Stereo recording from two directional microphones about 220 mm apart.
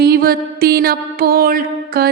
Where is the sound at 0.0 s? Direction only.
45° right (ahead or behind).